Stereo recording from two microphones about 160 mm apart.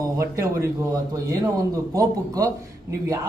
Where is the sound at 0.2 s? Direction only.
20° right (ahead or behind).